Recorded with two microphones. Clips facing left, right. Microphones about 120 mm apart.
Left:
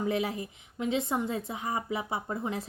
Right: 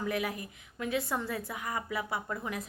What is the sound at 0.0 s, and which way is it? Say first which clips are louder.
A woman's voice: left 3 dB; 25° left (ahead or behind).